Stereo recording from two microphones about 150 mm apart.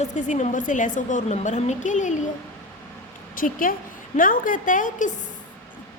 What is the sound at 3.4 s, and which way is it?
A woman's voice, 70° left (ahead or behind).